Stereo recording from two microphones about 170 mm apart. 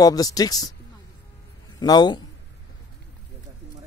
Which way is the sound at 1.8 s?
25° left (ahead or behind).